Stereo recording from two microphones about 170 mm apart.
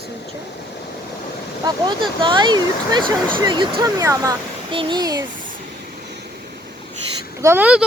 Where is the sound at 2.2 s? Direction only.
25° right (ahead or behind).